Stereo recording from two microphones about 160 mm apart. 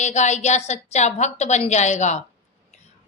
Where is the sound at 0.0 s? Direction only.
45° left (ahead or behind).